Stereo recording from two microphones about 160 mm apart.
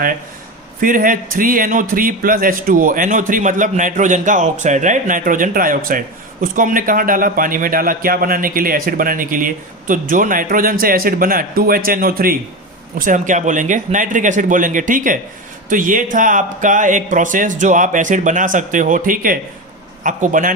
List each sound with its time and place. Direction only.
0.8 s a man's voice: 60° right (ahead or behind)
13.0 s a man's voice: 55° right (ahead or behind)